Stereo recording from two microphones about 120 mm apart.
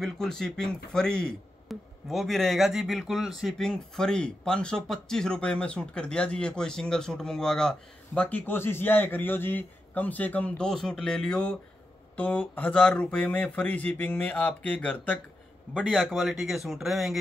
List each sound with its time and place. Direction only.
0.0 s a man's voice: 5° left (ahead or behind)